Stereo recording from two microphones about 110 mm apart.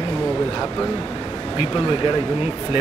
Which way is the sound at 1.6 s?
50° left (ahead or behind).